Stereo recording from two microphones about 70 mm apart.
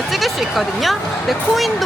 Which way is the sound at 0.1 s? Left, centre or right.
Centre.